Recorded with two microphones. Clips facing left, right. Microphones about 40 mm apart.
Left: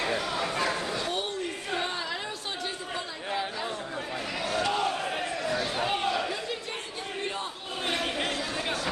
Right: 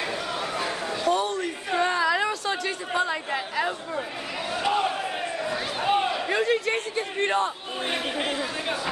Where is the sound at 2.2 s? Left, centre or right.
Right.